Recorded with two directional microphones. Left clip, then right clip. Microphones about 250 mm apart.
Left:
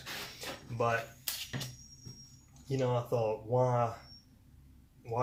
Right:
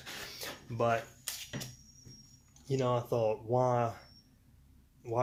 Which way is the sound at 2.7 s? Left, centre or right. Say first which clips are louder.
Right 1 dB; right.